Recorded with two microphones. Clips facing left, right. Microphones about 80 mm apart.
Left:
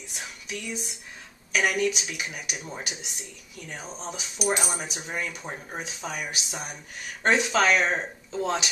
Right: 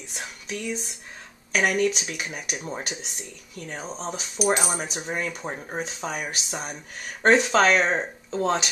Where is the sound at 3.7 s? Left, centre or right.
Right.